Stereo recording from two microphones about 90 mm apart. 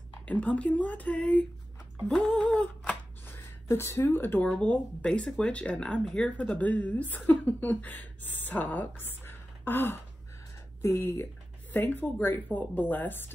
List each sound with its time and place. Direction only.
0.2 s speech: 15° left (ahead or behind)
3.3 s speech: 30° left (ahead or behind)
4.5 s speech: 10° left (ahead or behind)